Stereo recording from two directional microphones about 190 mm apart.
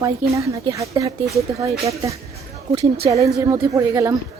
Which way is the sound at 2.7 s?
30° right (ahead or behind).